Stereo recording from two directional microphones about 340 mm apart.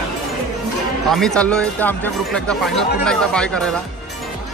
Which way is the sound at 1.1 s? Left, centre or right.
Centre.